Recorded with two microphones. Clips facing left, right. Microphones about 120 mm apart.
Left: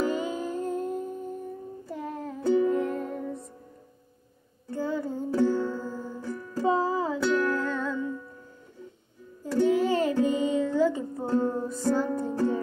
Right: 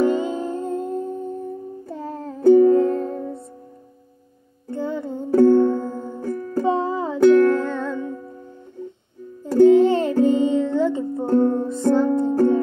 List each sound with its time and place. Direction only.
0.0 s music: 25° right (ahead or behind)
2.4 s music: 50° right (ahead or behind)
2.7 s music: 30° right (ahead or behind)
4.7 s music: 25° right (ahead or behind)
5.3 s music: 60° right (ahead or behind)
5.7 s music: 25° right (ahead or behind)
6.2 s music: 45° right (ahead or behind)
6.6 s music: 25° right (ahead or behind)
7.2 s music: 50° right (ahead or behind)
7.4 s music: 20° right (ahead or behind)
9.7 s music: 25° right (ahead or behind)
11.2 s music: 55° right (ahead or behind)
11.6 s music: 25° right (ahead or behind)